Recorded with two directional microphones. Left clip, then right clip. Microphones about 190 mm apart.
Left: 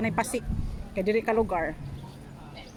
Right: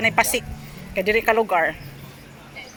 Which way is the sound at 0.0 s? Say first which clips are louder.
Right 9 dB; 10° left (ahead or behind).